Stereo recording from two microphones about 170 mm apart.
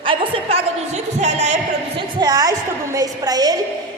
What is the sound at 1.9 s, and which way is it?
A woman's voice, 25° right (ahead or behind).